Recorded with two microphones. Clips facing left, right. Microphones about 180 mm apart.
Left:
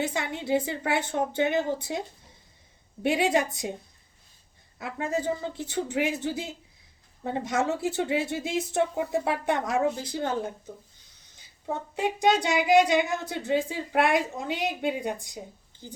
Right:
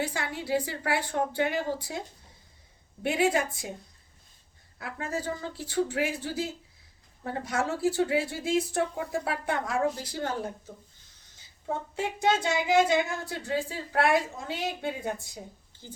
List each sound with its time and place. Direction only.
0.0 s speech: 20° left (ahead or behind)
4.8 s speech: 20° left (ahead or behind)
11.9 s speech: 15° left (ahead or behind)